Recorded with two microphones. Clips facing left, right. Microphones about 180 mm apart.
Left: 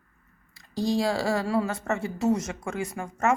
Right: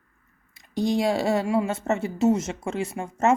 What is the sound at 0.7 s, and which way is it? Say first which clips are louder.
Speech: right 2 dB; 20° right (ahead or behind).